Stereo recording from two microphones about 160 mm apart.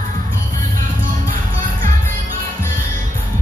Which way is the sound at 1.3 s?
60° right (ahead or behind).